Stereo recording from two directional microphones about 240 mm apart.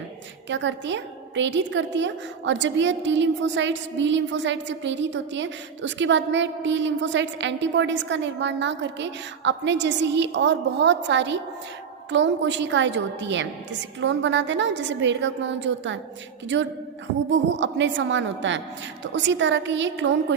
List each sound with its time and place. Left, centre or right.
0.4 s a woman's voice: right